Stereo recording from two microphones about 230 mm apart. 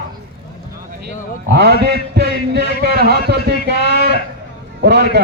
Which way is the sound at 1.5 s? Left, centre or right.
Right.